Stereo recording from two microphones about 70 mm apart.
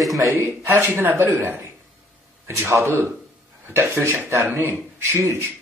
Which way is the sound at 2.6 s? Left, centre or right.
Right.